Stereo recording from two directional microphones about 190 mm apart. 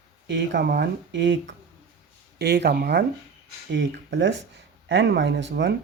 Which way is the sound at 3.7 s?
75° right (ahead or behind).